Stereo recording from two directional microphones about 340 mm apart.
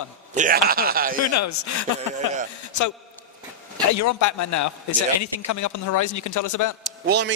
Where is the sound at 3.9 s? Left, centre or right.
Left.